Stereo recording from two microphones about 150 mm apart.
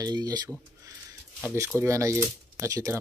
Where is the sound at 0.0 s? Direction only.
25° right (ahead or behind).